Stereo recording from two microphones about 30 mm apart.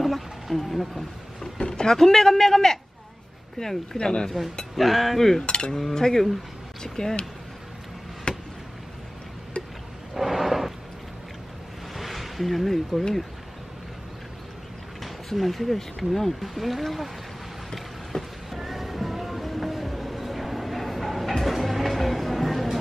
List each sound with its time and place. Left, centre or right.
0.0 s wild animals: centre
0.7 s speech: centre
1.4 s a sound: left
2.0 s a man's voice: centre
4.7 s speech: centre
5.4 s cutlery: left
5.9 s speech: centre
8.3 s chop: left
10.1 s a sound: centre
11.9 s a sound: centre
15.3 s speech: centre
18.1 s vehicle: left
18.5 s music: centre